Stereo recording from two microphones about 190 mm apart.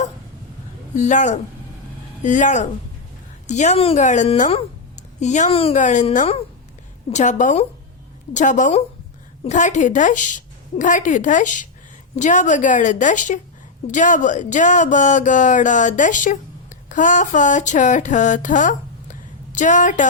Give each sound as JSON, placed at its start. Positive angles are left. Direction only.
{"t": 0.9, "sound": "speech", "side_deg": 40}